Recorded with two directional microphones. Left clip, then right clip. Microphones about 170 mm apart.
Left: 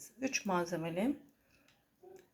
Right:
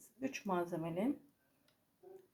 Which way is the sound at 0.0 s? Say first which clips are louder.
Left 6 dB; centre (ahead or behind).